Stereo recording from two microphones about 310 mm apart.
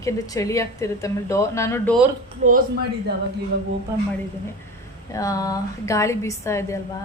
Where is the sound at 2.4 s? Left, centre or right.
Right.